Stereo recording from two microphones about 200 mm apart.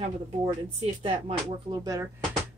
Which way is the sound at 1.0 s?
30° right (ahead or behind).